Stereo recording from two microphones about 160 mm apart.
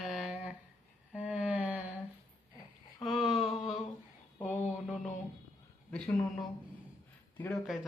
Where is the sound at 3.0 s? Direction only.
Centre (ahead or behind).